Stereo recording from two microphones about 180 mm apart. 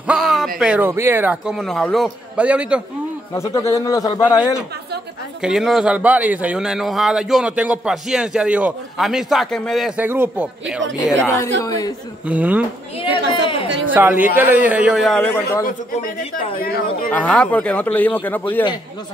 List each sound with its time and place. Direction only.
0.0 s a sound: 5° right (ahead or behind)
0.6 s a man's voice: 10° right (ahead or behind)
3.3 s speech: 20° left (ahead or behind)
5.4 s a man's voice: centre (ahead or behind)
11.2 s speech: 20° left (ahead or behind)
12.3 s a man's voice: 10° right (ahead or behind)
13.0 s speech: 30° left (ahead or behind)
13.7 s speech: 90° right
13.9 s a man's voice: 10° right (ahead or behind); by 15.6 s 10° left (ahead or behind)
17.1 s speech: 5° left (ahead or behind)